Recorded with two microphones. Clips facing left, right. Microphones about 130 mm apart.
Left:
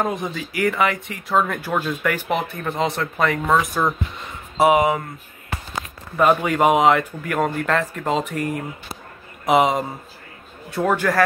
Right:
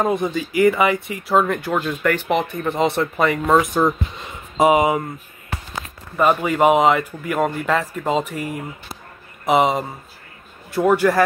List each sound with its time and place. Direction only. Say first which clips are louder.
0.0 s speech: right 4 dB; centre (ahead or behind)
3.5 s speech: right 5 dB; 25° right (ahead or behind)
4.6 s speech: right 1 dB; centre (ahead or behind)
6.1 s a man's voice: even; centre (ahead or behind)